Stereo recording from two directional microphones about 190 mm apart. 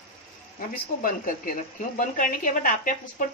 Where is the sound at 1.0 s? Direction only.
45° left (ahead or behind).